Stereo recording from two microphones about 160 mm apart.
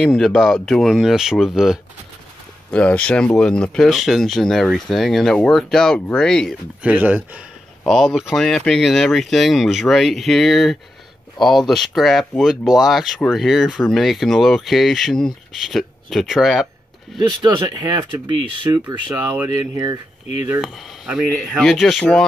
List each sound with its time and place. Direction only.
0.0 s speech: centre (ahead or behind)
6.8 s speech: 10° right (ahead or behind)
7.8 s speech: centre (ahead or behind)
17.3 s speech: 30° right (ahead or behind)
20.6 s speech: centre (ahead or behind)